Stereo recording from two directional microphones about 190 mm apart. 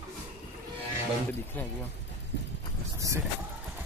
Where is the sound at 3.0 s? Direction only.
15° right (ahead or behind).